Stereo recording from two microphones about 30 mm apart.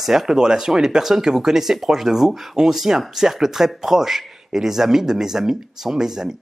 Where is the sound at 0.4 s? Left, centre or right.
Right.